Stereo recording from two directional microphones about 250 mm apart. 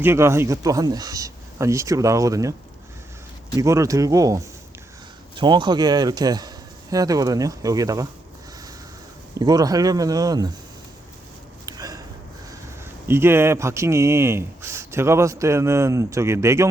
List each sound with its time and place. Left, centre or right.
0.0 s speech: centre
3.6 s speech: centre
9.4 s speech: centre
11.6 s a sound: centre
13.1 s speech: centre